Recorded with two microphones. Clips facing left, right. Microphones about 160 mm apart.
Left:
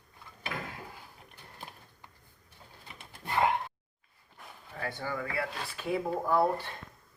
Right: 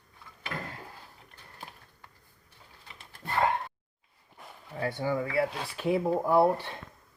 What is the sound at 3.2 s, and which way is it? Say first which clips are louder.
Gasp: even; 15° left (ahead or behind).